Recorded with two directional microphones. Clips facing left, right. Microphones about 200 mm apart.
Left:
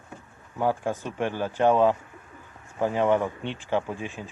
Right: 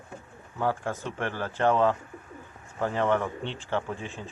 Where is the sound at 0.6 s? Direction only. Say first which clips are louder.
Left 3 dB; 15° left (ahead or behind).